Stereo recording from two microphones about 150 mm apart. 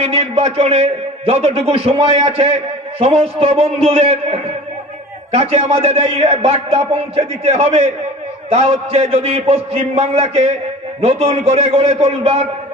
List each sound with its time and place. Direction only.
0.0 s a man's voice: 40° right (ahead or behind)